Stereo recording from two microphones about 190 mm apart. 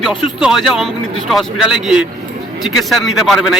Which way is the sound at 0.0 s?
Centre (ahead or behind).